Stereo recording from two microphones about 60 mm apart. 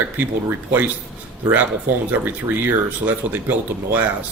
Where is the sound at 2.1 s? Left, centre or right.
Right.